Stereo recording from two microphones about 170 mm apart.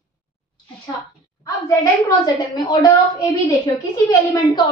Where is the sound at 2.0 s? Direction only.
20° left (ahead or behind).